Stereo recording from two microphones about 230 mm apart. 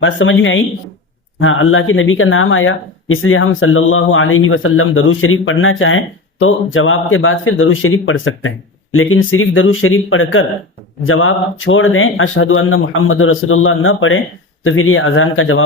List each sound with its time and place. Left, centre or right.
0.0 s speech: left